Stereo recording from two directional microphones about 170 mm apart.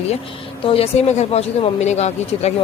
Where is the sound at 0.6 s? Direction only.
35° left (ahead or behind).